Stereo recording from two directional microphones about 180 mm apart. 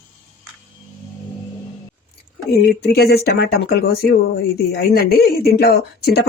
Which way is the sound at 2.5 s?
65° left (ahead or behind).